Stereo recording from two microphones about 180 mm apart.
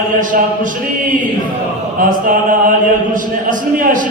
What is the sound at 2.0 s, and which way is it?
A man's voice, 45° right (ahead or behind).